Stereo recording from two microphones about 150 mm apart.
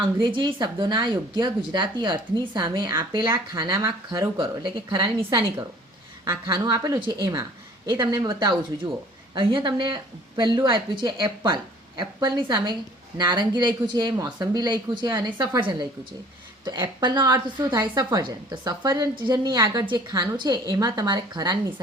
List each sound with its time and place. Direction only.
0.0 s a woman's voice: 35° right (ahead or behind)